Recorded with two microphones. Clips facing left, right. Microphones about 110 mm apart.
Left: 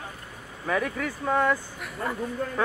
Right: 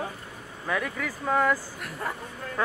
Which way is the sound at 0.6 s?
Centre (ahead or behind).